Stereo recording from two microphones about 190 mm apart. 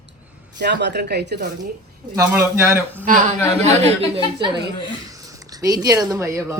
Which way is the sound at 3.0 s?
40° right (ahead or behind).